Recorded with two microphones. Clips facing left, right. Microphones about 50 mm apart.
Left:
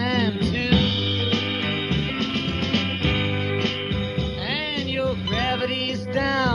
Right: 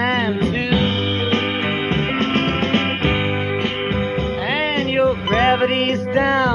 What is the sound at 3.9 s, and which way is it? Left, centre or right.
Music, right.